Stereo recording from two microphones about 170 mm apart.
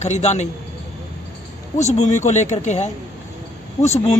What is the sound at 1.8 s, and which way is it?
A woman's voice, 40° left (ahead or behind).